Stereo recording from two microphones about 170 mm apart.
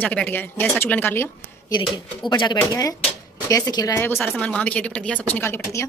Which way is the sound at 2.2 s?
25° left (ahead or behind).